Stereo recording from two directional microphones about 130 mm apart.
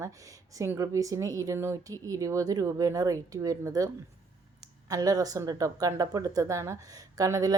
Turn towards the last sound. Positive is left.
turn(degrees=-25)  # may be behind; listen again after turning